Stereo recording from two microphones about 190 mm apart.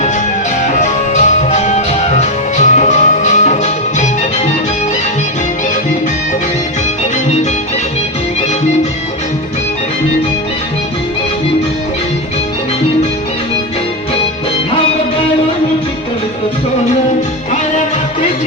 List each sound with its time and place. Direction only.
0.8 s music: 40° left (ahead or behind)